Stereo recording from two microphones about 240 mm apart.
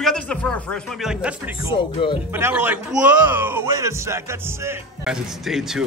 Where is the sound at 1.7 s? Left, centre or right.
Left.